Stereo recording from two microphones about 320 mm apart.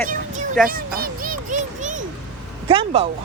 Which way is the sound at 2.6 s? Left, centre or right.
Centre.